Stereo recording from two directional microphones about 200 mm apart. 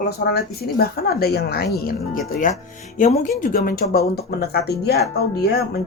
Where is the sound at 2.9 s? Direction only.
40° left (ahead or behind).